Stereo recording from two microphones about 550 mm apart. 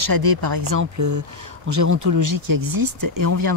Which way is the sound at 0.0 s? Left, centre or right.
Right.